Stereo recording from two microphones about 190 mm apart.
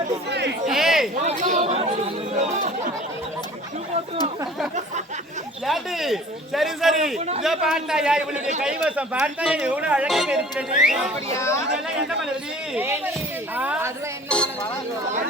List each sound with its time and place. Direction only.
0.3 s chatter: 60° right (ahead or behind)
0.7 s speech: centre (ahead or behind)
1.2 s chatter: 40° right (ahead or behind)
5.6 s speech: centre (ahead or behind)
11.3 s speech: 15° left (ahead or behind)
12.7 s a woman's voice: 10° right (ahead or behind)
14.3 s speech: 5° left (ahead or behind)